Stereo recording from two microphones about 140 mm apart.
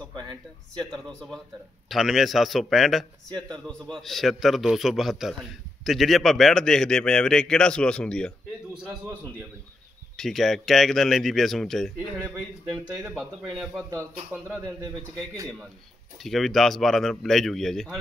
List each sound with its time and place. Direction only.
0.1 s speech: 30° right (ahead or behind)
1.0 s a man's voice: centre (ahead or behind)
3.3 s speech: 30° right (ahead or behind)
3.6 s a man's voice: 5° left (ahead or behind)
10.1 s a man's voice: centre (ahead or behind)
13.1 s a man's voice: 5° left (ahead or behind)
13.7 s speech: 20° right (ahead or behind)
16.2 s a man's voice: centre (ahead or behind)